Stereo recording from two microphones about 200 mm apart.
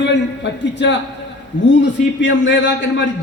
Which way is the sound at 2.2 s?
65° left (ahead or behind).